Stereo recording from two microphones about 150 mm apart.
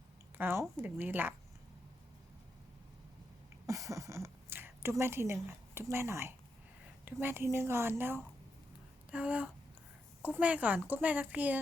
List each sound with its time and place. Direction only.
0.3 s a woman's voice: 15° right (ahead or behind)
3.7 s a woman's voice: 20° right (ahead or behind)